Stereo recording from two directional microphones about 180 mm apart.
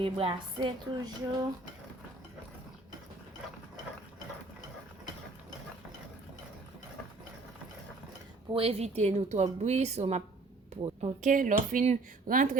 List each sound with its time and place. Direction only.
0.0 s a woman's voice: 30° right (ahead or behind)
8.5 s a woman's voice: 35° right (ahead or behind)